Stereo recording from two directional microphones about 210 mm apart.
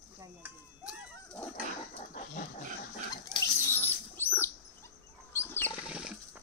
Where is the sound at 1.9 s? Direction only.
35° left (ahead or behind).